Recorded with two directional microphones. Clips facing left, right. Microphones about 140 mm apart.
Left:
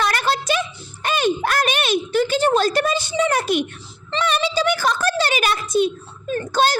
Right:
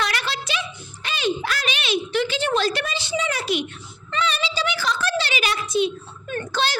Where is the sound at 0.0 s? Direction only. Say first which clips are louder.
Left 6 dB; 45° left (ahead or behind).